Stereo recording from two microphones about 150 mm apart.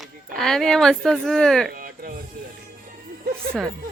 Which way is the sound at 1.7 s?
70° right (ahead or behind).